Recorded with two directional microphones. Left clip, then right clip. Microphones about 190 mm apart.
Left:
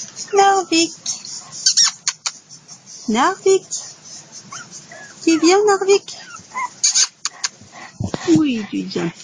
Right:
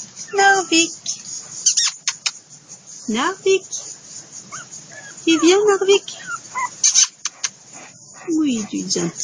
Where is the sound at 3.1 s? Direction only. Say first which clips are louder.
Left 3 dB; 30° left (ahead or behind).